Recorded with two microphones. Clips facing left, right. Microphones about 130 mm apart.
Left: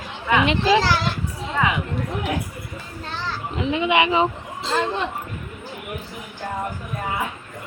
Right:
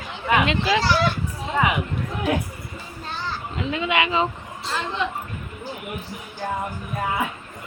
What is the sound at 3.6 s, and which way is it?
Speech, 20° left (ahead or behind).